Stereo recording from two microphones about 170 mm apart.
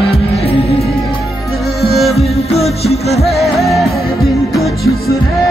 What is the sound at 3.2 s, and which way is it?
Music, centre (ahead or behind).